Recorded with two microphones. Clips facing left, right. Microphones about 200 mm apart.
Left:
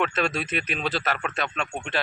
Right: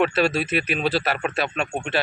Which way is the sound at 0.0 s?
10° right (ahead or behind).